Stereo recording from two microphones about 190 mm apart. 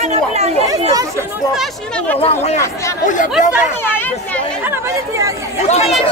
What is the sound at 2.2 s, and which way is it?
Speech, 35° left (ahead or behind).